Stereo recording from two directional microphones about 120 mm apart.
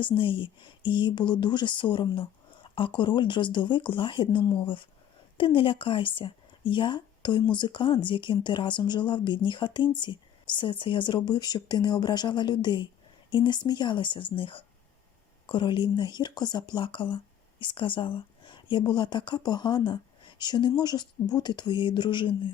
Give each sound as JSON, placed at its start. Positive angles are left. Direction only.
{"t": 0.0, "sound": "speech", "side_deg": 45}